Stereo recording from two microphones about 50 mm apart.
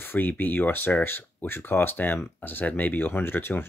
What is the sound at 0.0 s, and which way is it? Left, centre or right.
Speech, left.